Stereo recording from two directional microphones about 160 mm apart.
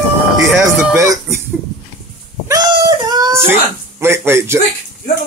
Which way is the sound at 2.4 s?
25° right (ahead or behind).